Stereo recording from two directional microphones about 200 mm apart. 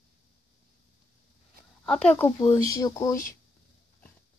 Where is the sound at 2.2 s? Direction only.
20° left (ahead or behind).